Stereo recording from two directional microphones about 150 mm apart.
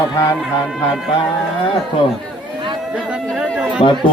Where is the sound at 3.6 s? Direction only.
5° right (ahead or behind).